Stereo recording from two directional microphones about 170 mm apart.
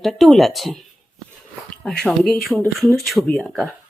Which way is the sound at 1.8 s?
5° left (ahead or behind).